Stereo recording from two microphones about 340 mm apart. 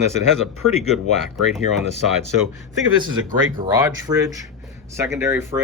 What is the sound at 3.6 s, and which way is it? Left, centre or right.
Speech, centre.